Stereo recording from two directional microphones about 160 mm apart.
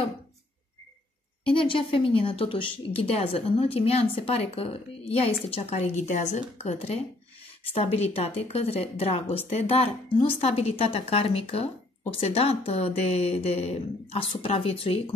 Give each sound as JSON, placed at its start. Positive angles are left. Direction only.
{"t": 1.5, "sound": "a woman's voice", "side_deg": 35}